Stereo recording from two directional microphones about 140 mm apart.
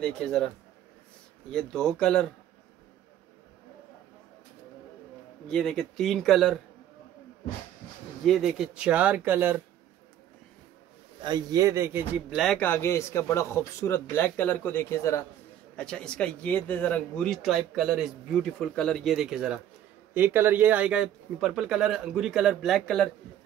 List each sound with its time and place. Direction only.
0.0 s a man's voice: 5° left (ahead or behind)
1.5 s a man's voice: 5° left (ahead or behind)
5.5 s a man's voice: 5° left (ahead or behind)
8.3 s speech: centre (ahead or behind)
11.2 s speech: 30° right (ahead or behind)
12.5 s speech: 15° left (ahead or behind)
15.7 s a man's voice: 5° left (ahead or behind)